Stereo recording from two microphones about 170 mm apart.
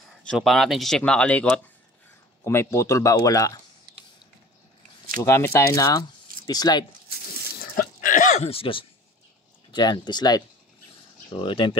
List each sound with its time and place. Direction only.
0.2 s speech: centre (ahead or behind); by 3.6 s 20° left (ahead or behind)
5.2 s speech: 15° left (ahead or behind)
7.7 s a sound: 50° left (ahead or behind); by 8.8 s 30° left (ahead or behind)
9.7 s speech: 25° left (ahead or behind)